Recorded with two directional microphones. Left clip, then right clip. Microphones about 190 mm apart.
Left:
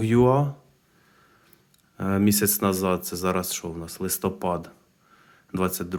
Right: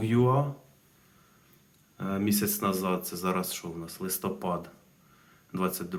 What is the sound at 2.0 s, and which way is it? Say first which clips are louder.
Speech: left 7 dB; 40° left (ahead or behind).